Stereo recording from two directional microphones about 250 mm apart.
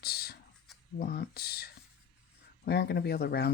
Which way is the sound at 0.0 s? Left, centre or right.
Left.